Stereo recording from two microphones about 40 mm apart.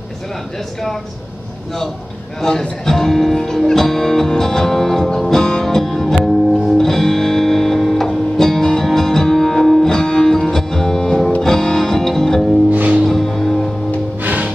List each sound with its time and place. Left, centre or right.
2.8 s music: centre
12.7 s music: right
13.0 s music: centre
14.2 s music: right